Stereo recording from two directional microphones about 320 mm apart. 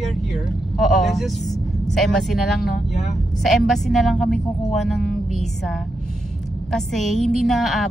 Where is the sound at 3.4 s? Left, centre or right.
Centre.